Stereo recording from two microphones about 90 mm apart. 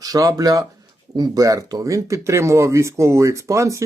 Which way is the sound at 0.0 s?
40° right (ahead or behind).